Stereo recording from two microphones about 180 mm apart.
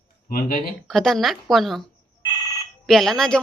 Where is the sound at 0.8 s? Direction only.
Centre (ahead or behind).